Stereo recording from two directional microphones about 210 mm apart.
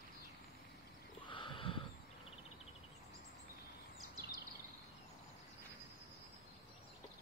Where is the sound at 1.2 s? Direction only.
25° left (ahead or behind).